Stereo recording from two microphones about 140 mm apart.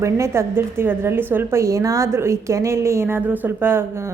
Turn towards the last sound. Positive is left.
turn(degrees=-15)  # may be behind; listen again after turning